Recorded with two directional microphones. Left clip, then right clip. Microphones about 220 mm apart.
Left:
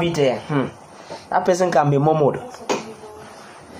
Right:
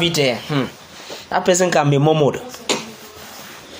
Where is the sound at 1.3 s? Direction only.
40° right (ahead or behind).